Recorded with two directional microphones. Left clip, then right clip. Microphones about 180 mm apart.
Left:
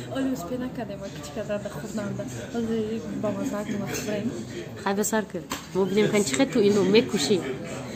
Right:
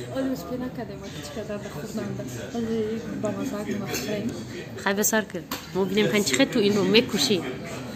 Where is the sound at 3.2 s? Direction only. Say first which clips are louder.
Left 1 dB; 5° left (ahead or behind).